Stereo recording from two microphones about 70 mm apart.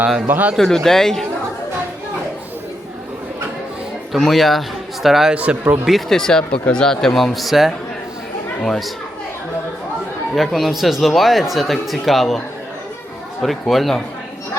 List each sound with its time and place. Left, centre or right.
0.3 s speech: right
0.5 s speech: centre
4.1 s speech: centre
5.3 s speech: centre
5.8 s speech: centre
10.3 s speech: centre
13.4 s speech: centre